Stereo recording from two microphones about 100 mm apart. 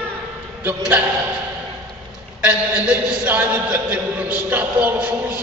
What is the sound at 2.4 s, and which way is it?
A man's voice, 10° right (ahead or behind).